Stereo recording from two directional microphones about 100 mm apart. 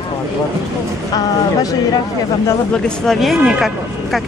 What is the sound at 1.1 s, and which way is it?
Speech, 40° left (ahead or behind).